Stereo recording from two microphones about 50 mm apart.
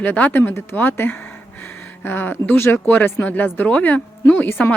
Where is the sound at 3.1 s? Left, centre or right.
Left.